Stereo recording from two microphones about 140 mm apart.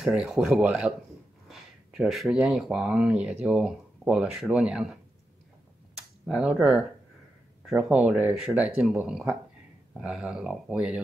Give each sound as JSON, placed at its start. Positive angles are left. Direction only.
{"t": 0.0, "sound": "speech", "side_deg": -5}
{"t": 6.2, "sound": "speech", "side_deg": -5}